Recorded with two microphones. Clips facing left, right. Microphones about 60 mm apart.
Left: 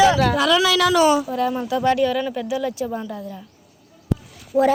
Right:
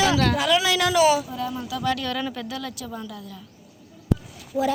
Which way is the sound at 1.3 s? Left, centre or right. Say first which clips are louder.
Left 8 dB; left.